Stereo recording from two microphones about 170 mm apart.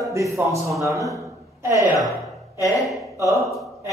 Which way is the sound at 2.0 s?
Centre (ahead or behind).